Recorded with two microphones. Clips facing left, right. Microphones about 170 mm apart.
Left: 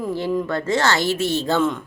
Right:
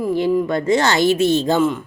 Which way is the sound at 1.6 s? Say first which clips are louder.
Right 3 dB; 5° right (ahead or behind).